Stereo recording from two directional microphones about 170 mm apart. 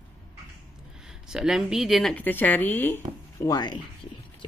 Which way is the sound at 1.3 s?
5° right (ahead or behind).